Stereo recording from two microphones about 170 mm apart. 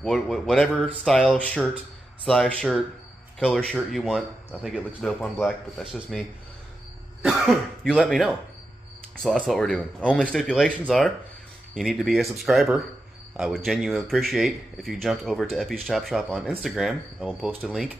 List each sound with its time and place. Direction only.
0.0 s speech: centre (ahead or behind)
1.0 s a sound: 5° left (ahead or behind)
2.2 s speech: 5° left (ahead or behind)
7.2 s speech: centre (ahead or behind)